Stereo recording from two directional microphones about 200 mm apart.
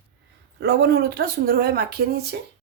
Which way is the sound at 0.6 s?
55° right (ahead or behind).